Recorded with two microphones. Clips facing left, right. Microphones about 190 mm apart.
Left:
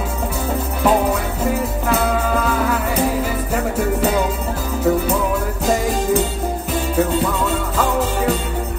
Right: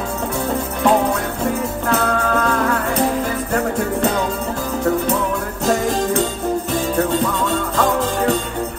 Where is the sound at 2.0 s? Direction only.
5° left (ahead or behind).